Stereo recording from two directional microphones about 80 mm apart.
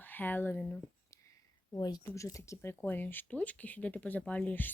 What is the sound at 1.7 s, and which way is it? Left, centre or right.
Speech, left.